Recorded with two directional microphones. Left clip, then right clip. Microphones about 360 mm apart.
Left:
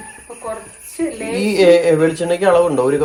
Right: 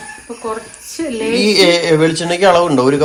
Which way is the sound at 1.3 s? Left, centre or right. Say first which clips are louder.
Even; centre.